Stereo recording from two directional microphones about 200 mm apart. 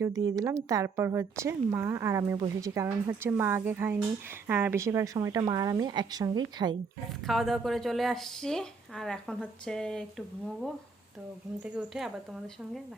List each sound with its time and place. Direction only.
0.3 s a woman's voice: 15° right (ahead or behind)
7.3 s speech: centre (ahead or behind)